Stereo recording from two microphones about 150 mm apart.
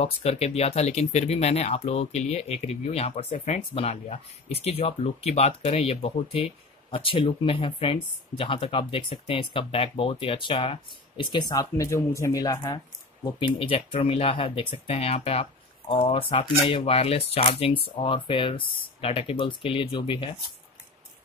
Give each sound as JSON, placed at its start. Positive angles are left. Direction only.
{"t": 0.0, "sound": "speech", "side_deg": 45}